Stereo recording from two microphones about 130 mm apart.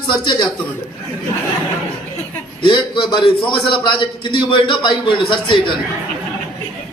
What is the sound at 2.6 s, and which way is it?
A man's voice, 35° left (ahead or behind).